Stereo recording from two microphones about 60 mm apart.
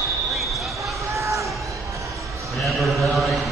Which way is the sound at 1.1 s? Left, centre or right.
Right.